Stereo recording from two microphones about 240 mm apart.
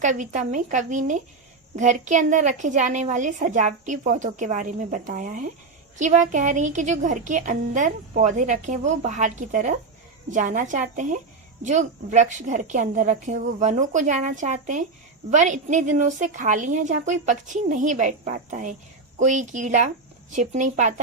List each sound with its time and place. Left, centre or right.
0.0 s a woman's voice: right